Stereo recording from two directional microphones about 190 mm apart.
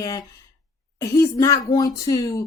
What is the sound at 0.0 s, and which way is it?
Speech, 20° left (ahead or behind).